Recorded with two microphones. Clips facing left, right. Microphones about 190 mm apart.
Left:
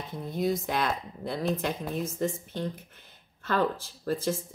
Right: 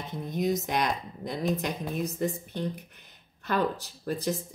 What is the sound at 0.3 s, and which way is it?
Speech, 20° right (ahead or behind).